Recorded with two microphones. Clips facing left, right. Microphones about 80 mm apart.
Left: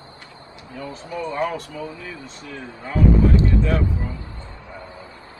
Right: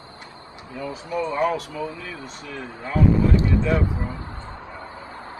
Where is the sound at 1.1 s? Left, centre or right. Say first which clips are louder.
Right 3 dB; centre.